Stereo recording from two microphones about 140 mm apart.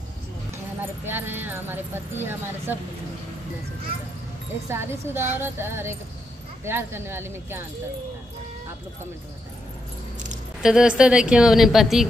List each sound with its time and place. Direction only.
1.0 s speech: 15° right (ahead or behind)
4.6 s speech: 15° right (ahead or behind)
10.6 s a woman's voice: 5° right (ahead or behind)